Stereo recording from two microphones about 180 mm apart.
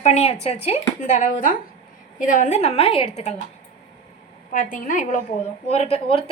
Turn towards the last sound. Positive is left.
turn(degrees=30)  # may be behind; listen again after turning